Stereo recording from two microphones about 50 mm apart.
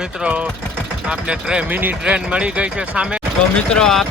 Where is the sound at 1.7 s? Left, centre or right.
Right.